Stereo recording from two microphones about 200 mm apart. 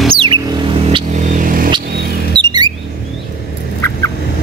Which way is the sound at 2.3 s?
20° right (ahead or behind).